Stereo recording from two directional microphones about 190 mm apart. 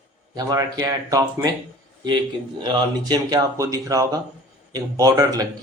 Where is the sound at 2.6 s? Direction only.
20° right (ahead or behind).